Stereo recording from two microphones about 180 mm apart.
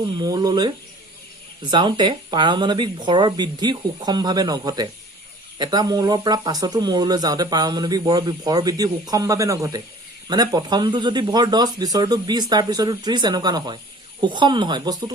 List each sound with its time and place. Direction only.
0.2 s speech: 20° right (ahead or behind)